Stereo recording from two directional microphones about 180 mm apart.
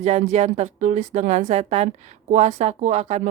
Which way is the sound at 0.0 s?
40° right (ahead or behind).